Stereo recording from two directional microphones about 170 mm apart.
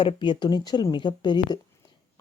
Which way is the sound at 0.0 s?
30° left (ahead or behind).